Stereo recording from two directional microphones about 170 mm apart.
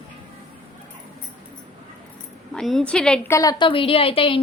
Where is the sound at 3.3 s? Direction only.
20° left (ahead or behind).